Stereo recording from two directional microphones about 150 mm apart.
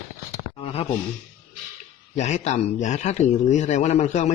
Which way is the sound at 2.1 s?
50° left (ahead or behind).